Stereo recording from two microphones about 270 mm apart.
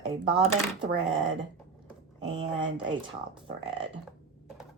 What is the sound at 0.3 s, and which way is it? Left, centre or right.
Speech, right.